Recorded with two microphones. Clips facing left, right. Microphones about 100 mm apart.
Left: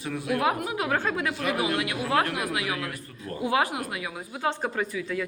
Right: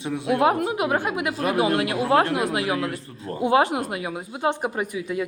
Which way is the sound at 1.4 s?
35° right (ahead or behind).